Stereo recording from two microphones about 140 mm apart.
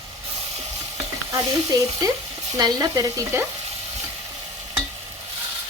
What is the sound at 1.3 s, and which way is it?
Stir, 25° right (ahead or behind).